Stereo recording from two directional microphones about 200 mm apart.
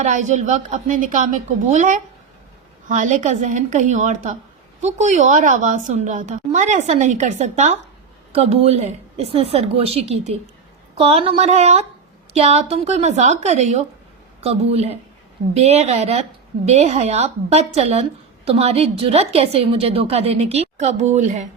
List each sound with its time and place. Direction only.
0.0 s a woman's voice: 35° right (ahead or behind)